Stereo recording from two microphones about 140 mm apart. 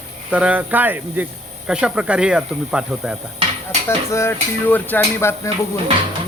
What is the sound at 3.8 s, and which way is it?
Speech, 20° left (ahead or behind).